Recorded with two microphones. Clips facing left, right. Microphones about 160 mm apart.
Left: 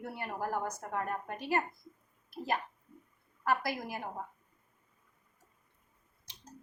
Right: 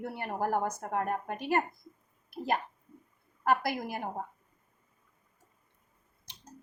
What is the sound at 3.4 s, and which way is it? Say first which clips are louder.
Speech: right 4 dB; 55° right (ahead or behind).